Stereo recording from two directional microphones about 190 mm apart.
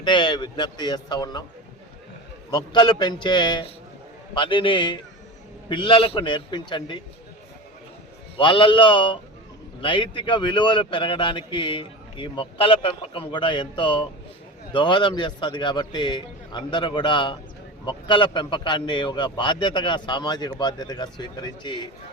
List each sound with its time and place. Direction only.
0.0 s a man's voice: 25° left (ahead or behind)
2.5 s a man's voice: 25° left (ahead or behind)
8.4 s a man's voice: 25° left (ahead or behind)